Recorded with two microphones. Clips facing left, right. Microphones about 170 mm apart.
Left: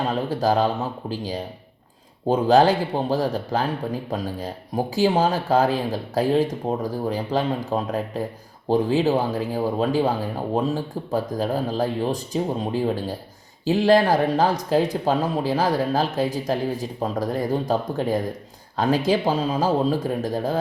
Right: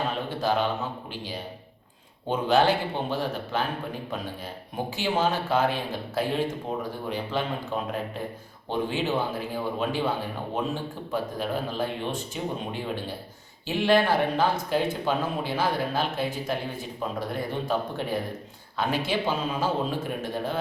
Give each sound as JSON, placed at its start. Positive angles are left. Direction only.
{"t": 0.1, "sound": "speech", "side_deg": 40}